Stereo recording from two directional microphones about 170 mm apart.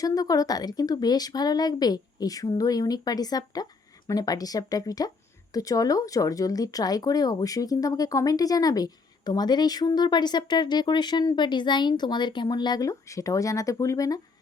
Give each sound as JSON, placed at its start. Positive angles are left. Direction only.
{"t": 0.0, "sound": "speech", "side_deg": 20}